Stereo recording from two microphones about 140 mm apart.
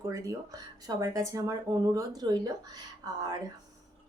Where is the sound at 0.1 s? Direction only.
25° right (ahead or behind).